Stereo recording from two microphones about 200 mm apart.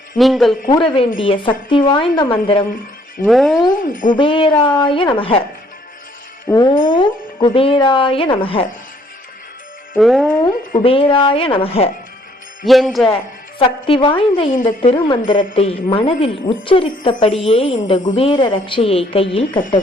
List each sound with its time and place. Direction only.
0.2 s speech: centre (ahead or behind)
0.7 s speech: 25° left (ahead or behind)
3.2 s speech: centre (ahead or behind)
3.7 s speech: 40° left (ahead or behind)
4.2 s speech: 25° left (ahead or behind)
6.5 s speech: 20° left (ahead or behind)
9.9 s speech: centre (ahead or behind)
10.8 s speech: 25° left (ahead or behind)
12.6 s speech: centre (ahead or behind)
13.1 s speech: 25° left (ahead or behind)